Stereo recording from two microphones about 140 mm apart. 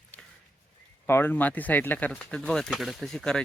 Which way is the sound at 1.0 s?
15° left (ahead or behind).